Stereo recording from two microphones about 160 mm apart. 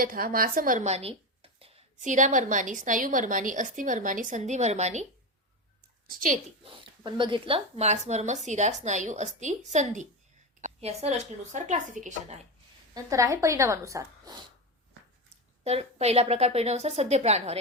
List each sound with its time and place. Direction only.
0.0 s a woman's voice: 65° right (ahead or behind)
0.9 s a sound: 40° right (ahead or behind)
2.0 s a woman's voice: 50° right (ahead or behind)
6.1 s a woman's voice: 55° right (ahead or behind)
6.7 s a woman's voice: 30° right (ahead or behind); by 10.1 s 50° right (ahead or behind)
10.6 s a sound: 40° right (ahead or behind)
11.5 s a woman's voice: 50° right (ahead or behind)
12.9 s speech: 20° right (ahead or behind)
15.6 s a woman's voice: 40° right (ahead or behind)